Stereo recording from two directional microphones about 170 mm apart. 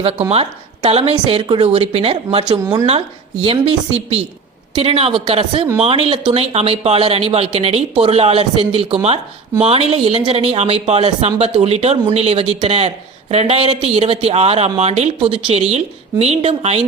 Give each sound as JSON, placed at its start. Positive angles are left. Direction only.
{"t": 0.0, "sound": "speech", "side_deg": -35}
{"t": 2.5, "sound": "speech", "side_deg": -25}
{"t": 3.4, "sound": "speech", "side_deg": -35}